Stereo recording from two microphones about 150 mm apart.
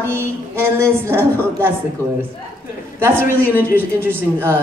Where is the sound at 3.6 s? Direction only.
15° right (ahead or behind).